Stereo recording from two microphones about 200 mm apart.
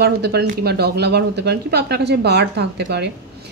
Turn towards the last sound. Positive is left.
turn(degrees=-55)  # may be behind; listen again after turning